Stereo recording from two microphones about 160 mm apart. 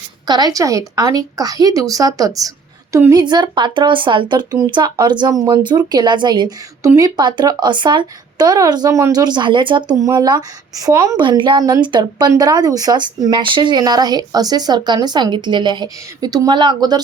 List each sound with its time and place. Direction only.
0.3 s a woman's voice: 25° right (ahead or behind)